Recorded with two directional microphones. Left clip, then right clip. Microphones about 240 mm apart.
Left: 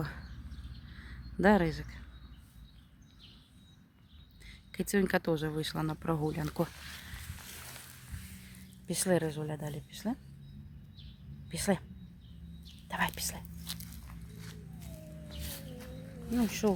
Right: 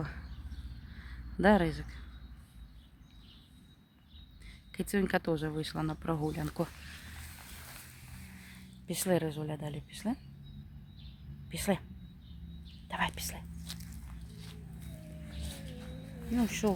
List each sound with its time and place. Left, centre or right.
1.0 s a sound: centre
4.4 s speech: centre
8.9 s speech: centre
11.4 s speech: centre
12.9 s whispering: centre
16.3 s speech: centre